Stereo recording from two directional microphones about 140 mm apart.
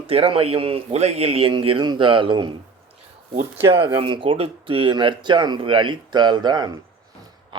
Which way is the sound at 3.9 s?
35° right (ahead or behind).